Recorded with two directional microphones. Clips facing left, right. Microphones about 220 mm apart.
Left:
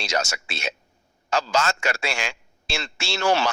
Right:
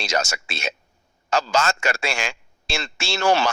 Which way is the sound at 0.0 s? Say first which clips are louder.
Right 2 dB; 45° right (ahead or behind).